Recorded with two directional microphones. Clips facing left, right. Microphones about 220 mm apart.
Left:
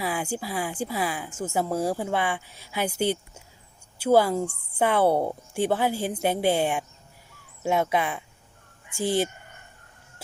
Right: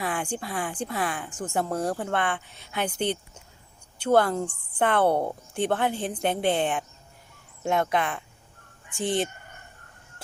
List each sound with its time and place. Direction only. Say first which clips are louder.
0.0 s speech: left 1 dB; 5° left (ahead or behind)